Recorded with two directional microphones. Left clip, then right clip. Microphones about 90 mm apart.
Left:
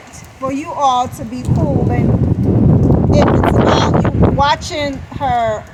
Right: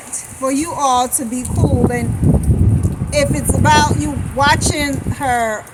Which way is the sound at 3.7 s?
30° right (ahead or behind).